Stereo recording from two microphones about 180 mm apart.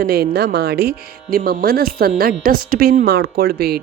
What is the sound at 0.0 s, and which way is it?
Speech, 60° right (ahead or behind).